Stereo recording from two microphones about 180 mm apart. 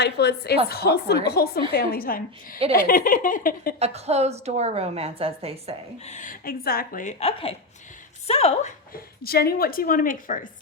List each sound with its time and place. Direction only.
0.0 s a woman's voice: 65° left (ahead or behind)
3.8 s a woman's voice: 35° right (ahead or behind)
6.1 s a woman's voice: 45° left (ahead or behind)
8.9 s a woman's voice: 55° left (ahead or behind)